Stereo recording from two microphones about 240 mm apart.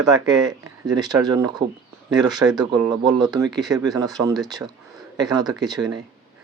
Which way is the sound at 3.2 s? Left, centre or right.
Centre.